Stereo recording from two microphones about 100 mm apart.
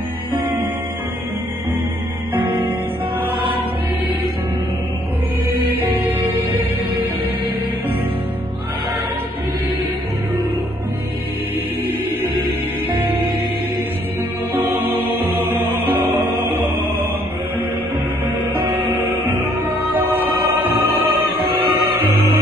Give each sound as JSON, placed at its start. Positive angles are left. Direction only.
{"t": 2.3, "sound": "music", "side_deg": -20}
{"t": 6.0, "sound": "music", "side_deg": -20}
{"t": 12.9, "sound": "music", "side_deg": -60}
{"t": 14.5, "sound": "music", "side_deg": -20}
{"t": 19.0, "sound": "music", "side_deg": -20}